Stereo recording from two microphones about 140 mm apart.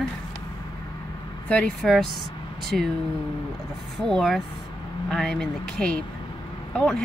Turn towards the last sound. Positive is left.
turn(degrees=5)  # may be behind; listen again after turning